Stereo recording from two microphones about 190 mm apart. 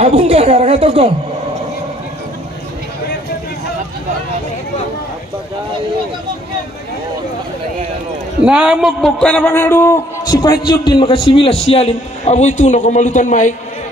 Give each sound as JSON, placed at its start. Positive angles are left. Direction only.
{"t": 0.0, "sound": "a woman's voice", "side_deg": -30}
{"t": 8.5, "sound": "a man's voice", "side_deg": -5}